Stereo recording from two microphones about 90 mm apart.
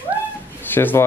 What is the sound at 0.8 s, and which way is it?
Speech, 25° left (ahead or behind).